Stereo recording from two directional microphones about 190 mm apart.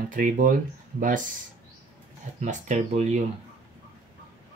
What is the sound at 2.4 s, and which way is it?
Speech, 40° right (ahead or behind).